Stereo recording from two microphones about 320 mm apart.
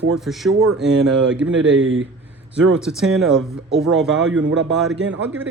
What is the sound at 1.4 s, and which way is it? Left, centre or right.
Speech, right.